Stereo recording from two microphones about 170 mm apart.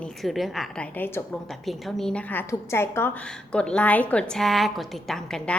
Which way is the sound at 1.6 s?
Centre (ahead or behind).